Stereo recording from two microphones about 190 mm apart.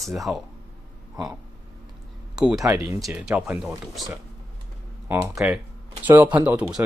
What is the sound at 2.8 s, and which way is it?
Speech, centre (ahead or behind).